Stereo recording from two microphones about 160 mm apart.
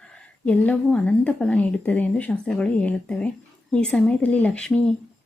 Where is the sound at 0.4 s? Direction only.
10° left (ahead or behind).